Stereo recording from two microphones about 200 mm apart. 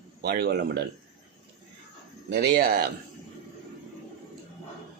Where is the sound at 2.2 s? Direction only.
55° right (ahead or behind).